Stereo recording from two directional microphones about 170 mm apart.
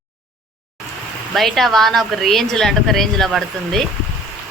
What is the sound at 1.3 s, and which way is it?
A woman's voice, centre (ahead or behind).